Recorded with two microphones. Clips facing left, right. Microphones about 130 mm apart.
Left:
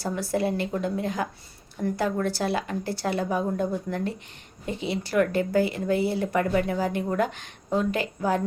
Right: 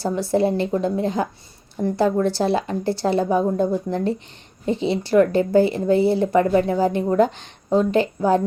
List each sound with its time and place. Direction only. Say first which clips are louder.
0.0 s speech: right 7 dB; 25° right (ahead or behind)